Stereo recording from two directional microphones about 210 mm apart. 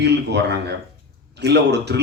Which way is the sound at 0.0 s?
55° right (ahead or behind).